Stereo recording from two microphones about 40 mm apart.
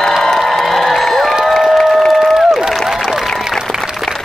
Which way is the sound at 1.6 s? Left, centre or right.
Centre.